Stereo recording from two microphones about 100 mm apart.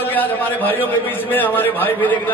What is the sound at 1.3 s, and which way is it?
Speech, 20° left (ahead or behind).